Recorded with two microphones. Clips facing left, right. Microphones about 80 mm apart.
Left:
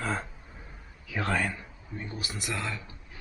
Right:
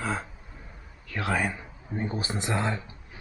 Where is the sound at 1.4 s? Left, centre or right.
Centre.